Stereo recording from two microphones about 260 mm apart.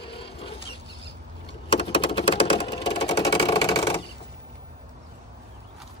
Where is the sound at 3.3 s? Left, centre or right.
Centre.